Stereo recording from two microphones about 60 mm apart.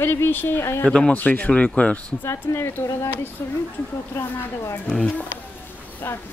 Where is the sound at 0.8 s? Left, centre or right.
Centre.